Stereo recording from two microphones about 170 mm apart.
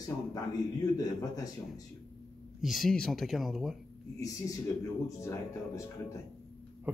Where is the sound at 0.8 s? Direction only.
20° left (ahead or behind).